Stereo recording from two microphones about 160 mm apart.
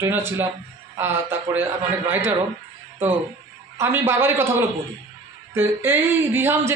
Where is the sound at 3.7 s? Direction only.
15° right (ahead or behind).